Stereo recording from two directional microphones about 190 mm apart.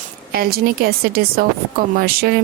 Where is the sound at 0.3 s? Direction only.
50° right (ahead or behind).